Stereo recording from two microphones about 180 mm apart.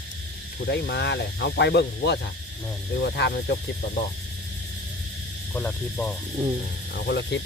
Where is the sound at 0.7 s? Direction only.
70° left (ahead or behind).